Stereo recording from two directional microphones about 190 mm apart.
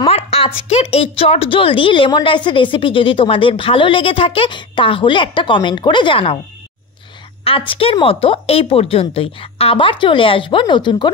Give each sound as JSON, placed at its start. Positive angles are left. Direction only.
{"t": 0.0, "sound": "a sound", "side_deg": 30}
{"t": 0.7, "sound": "a woman's voice", "side_deg": 30}
{"t": 7.4, "sound": "a woman's voice", "side_deg": 25}